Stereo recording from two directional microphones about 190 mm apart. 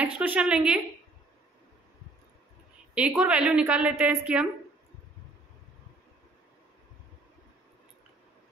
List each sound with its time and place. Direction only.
0.0 s a woman's voice: 10° right (ahead or behind)
2.9 s a woman's voice: 5° right (ahead or behind)